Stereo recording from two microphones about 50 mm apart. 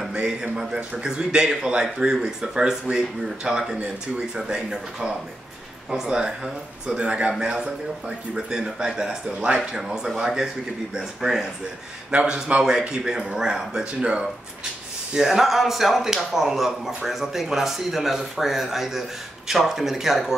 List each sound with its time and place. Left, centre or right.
0.1 s speech: centre
12.1 s speech: right
12.4 s speech: centre
14.0 s speech: right
15.1 s speech: centre